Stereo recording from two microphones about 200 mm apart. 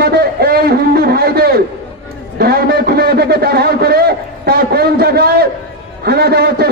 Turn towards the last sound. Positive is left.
turn(degrees=-50)  # may be behind; listen again after turning